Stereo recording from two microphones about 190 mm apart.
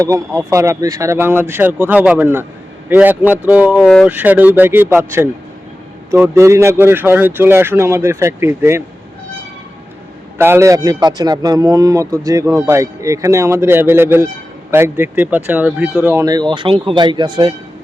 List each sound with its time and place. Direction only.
0.0 s speech: 15° right (ahead or behind)
10.3 s speech: 10° right (ahead or behind)